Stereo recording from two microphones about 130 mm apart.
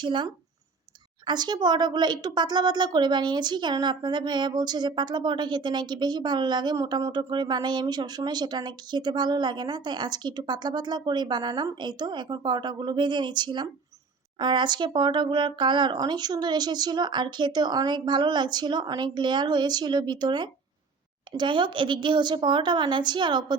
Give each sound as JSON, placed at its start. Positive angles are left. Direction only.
{"t": 0.0, "sound": "speech", "side_deg": -40}